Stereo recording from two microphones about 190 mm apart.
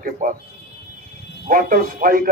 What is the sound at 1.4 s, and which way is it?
Speech, 45° right (ahead or behind).